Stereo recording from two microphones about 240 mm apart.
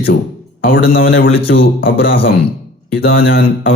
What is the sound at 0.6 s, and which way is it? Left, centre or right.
A man's voice, left.